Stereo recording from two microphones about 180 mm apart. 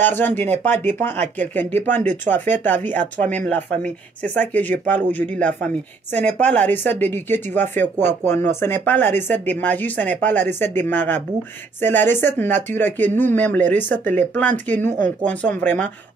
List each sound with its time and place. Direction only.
0.0 s speech: 10° left (ahead or behind)
6.1 s speech: 10° left (ahead or behind)